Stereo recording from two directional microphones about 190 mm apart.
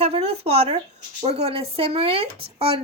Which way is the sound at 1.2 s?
30° right (ahead or behind).